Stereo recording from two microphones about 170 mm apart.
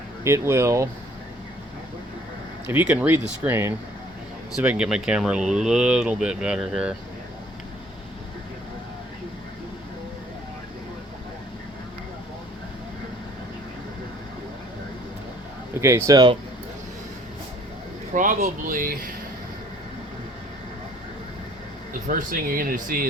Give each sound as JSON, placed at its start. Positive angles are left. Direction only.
{"t": 0.3, "sound": "speech", "side_deg": -15}
{"t": 2.6, "sound": "speech", "side_deg": -10}
{"t": 15.8, "sound": "speech", "side_deg": -15}
{"t": 18.1, "sound": "speech", "side_deg": -50}
{"t": 22.0, "sound": "speech", "side_deg": -55}